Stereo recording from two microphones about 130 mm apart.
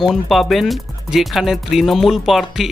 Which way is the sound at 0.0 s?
Centre (ahead or behind).